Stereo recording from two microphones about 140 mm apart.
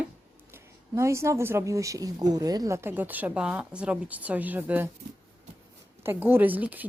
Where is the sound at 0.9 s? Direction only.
20° right (ahead or behind).